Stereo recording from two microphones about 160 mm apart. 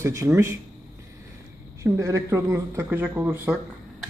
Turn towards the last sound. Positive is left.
turn(degrees=-10)  # may be behind; listen again after turning